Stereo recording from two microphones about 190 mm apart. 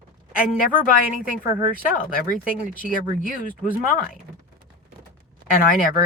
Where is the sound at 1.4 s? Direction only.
45° left (ahead or behind).